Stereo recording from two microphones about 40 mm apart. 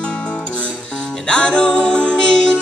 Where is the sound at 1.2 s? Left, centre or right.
Left.